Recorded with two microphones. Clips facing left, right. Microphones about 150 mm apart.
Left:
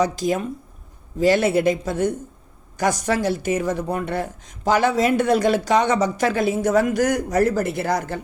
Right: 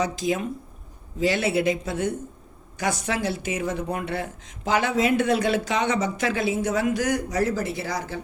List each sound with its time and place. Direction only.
0.0 s speech: 45° left (ahead or behind)